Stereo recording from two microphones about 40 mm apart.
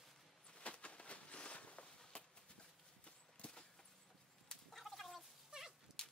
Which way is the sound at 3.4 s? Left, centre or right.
Left.